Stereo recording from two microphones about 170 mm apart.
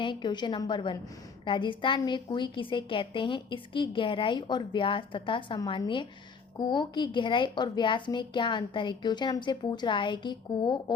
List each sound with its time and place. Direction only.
0.0 s a woman's voice: 25° left (ahead or behind)